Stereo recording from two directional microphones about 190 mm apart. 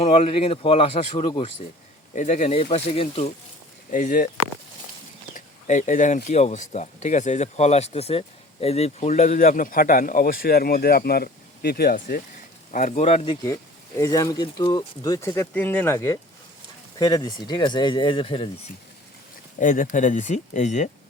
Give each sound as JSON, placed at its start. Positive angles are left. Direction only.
{"t": 0.0, "sound": "speech", "side_deg": 35}
{"t": 3.9, "sound": "speech", "side_deg": 45}
{"t": 5.3, "sound": "a sound", "side_deg": 40}
{"t": 6.2, "sound": "speech", "side_deg": 40}
{"t": 12.7, "sound": "speech", "side_deg": 40}
{"t": 13.5, "sound": "speech", "side_deg": 15}
{"t": 19.5, "sound": "speech", "side_deg": 45}